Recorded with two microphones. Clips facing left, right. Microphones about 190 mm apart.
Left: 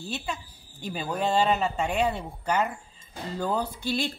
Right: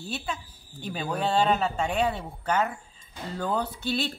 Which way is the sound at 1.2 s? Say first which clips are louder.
Even; 10° left (ahead or behind).